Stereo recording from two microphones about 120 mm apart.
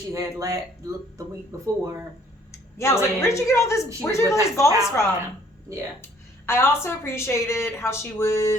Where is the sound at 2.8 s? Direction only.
20° left (ahead or behind).